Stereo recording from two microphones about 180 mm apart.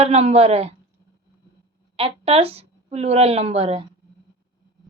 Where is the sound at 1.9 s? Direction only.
30° right (ahead or behind).